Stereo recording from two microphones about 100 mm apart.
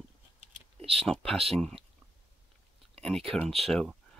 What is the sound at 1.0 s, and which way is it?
Speech, 5° left (ahead or behind).